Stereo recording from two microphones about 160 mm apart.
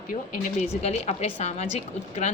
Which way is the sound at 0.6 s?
45° left (ahead or behind).